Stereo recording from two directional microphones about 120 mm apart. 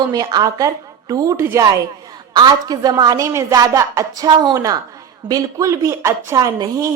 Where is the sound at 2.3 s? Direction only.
35° right (ahead or behind).